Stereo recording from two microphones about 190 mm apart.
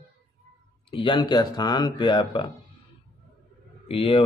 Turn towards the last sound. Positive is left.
turn(degrees=30)  # may be behind; listen again after turning